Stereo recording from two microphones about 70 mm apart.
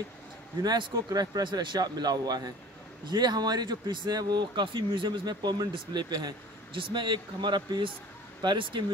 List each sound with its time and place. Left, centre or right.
0.6 s speech: right
3.1 s speech: right